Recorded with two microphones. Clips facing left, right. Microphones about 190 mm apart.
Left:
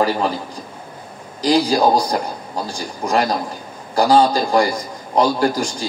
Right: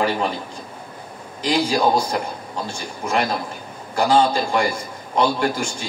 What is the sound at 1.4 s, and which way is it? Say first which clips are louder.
A man's voice: left 4 dB; 35° left (ahead or behind).